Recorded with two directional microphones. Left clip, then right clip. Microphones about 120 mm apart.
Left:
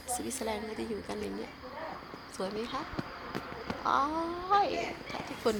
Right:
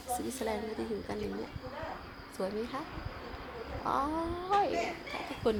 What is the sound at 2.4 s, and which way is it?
Speech, 5° left (ahead or behind).